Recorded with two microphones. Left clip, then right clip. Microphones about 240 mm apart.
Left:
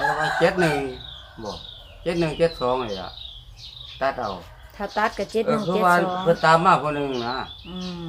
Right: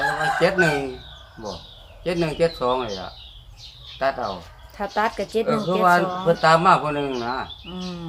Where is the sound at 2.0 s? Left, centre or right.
Centre.